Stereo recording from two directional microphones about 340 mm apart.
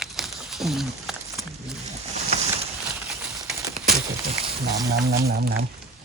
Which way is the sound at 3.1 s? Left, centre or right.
Centre.